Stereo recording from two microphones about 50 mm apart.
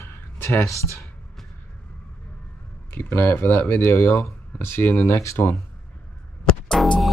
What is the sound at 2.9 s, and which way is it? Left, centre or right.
Speech, left.